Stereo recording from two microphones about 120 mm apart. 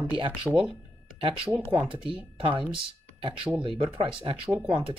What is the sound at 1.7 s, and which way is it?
Speech, 45° right (ahead or behind).